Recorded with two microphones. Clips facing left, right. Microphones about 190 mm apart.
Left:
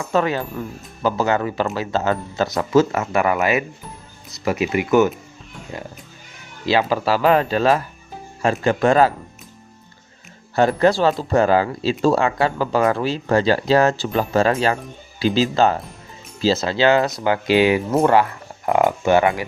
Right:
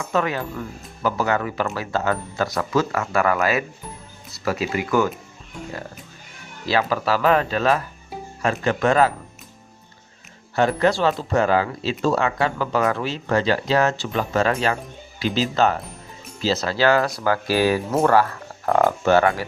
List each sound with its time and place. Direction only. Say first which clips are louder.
0.1 s speech: left 3 dB; 30° left (ahead or behind)
6.7 s speech: left 3 dB; 30° left (ahead or behind)
10.5 s speech: left 3 dB; 35° left (ahead or behind); by 19.5 s 15° left (ahead or behind)